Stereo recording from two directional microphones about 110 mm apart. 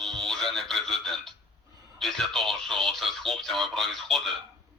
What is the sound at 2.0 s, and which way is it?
Speech, centre (ahead or behind).